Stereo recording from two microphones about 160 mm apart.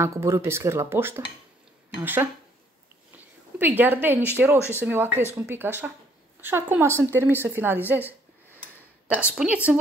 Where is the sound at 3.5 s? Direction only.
10° right (ahead or behind).